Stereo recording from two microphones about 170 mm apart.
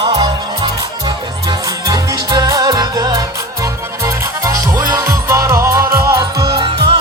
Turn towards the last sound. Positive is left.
turn(degrees=-35)  # may be behind; listen again after turning